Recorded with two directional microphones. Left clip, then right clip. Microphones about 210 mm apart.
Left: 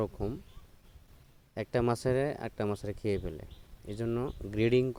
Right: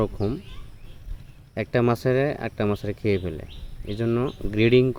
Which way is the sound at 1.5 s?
45° left (ahead or behind).